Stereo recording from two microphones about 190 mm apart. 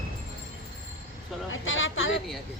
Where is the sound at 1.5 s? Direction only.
90° left.